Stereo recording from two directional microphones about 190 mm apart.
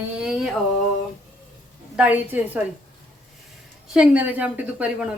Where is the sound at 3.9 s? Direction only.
5° right (ahead or behind).